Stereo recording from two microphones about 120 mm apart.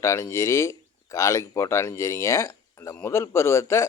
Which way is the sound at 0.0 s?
25° left (ahead or behind).